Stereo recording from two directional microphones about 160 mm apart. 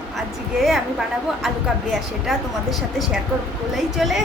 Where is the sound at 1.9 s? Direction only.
Centre (ahead or behind).